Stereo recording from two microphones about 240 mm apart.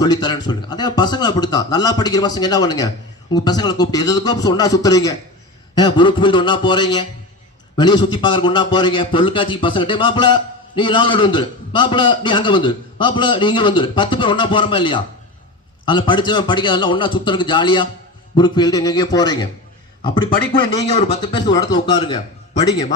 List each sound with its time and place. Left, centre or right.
0.0 s a man's voice: centre
20.9 s a man's voice: left